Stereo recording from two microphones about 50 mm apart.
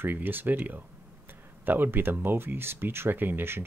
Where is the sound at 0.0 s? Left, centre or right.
Right.